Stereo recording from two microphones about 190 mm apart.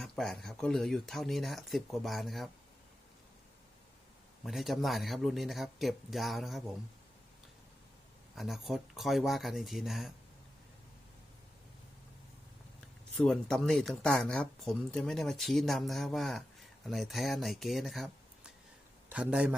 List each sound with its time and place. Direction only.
0.0 s speech: centre (ahead or behind)
4.4 s speech: centre (ahead or behind)
8.4 s speech: centre (ahead or behind)
13.1 s a man's voice: centre (ahead or behind)